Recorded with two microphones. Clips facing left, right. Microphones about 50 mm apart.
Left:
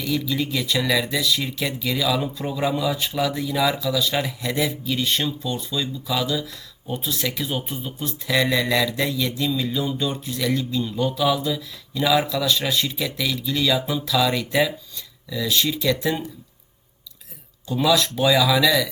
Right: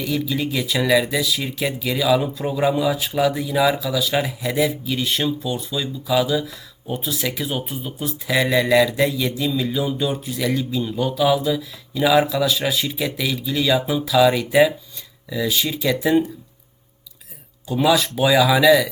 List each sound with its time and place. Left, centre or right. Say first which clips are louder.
0.0 s speech: right 1 dB; centre
17.7 s speech: right 2 dB; centre